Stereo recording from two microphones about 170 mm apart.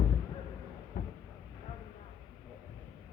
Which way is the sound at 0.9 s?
50° left (ahead or behind).